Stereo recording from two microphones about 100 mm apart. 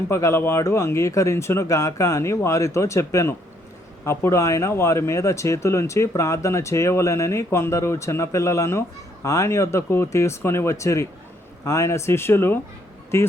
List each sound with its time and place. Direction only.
0.1 s speech: 30° left (ahead or behind)